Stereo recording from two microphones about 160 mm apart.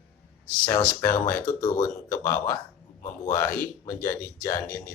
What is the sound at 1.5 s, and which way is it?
Speech, 20° left (ahead or behind).